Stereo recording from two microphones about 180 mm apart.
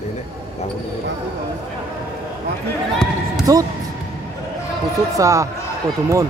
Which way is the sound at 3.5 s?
20° right (ahead or behind).